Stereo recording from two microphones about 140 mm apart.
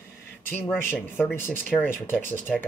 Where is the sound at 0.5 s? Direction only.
15° left (ahead or behind).